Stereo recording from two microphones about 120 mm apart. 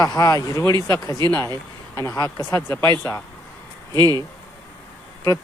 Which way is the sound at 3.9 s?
35° right (ahead or behind).